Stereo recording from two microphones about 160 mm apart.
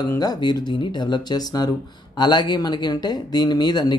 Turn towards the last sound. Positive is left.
turn(degrees=25)  # may be behind; listen again after turning